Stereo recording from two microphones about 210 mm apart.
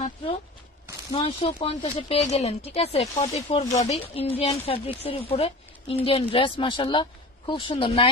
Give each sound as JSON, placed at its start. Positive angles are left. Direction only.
{"t": 1.1, "sound": "a woman's voice", "side_deg": 30}